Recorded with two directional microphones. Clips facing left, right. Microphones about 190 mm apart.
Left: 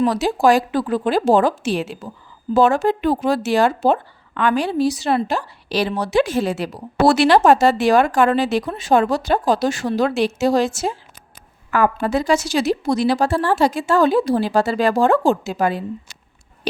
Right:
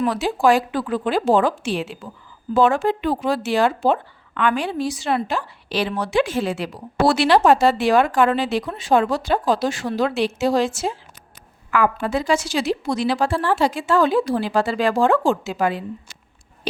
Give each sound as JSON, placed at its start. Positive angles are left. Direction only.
{"t": 0.0, "sound": "a woman's voice", "side_deg": 40}